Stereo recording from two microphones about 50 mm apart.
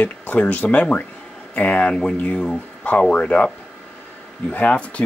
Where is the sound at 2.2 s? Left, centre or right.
Left.